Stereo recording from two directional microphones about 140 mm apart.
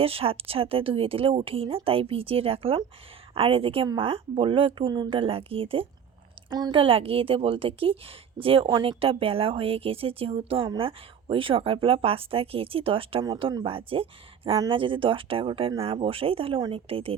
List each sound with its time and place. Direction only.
0.0 s a woman's voice: 45° right (ahead or behind)